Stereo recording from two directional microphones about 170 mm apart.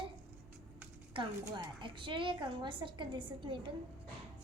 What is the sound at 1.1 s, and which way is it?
A woman's voice, 25° right (ahead or behind).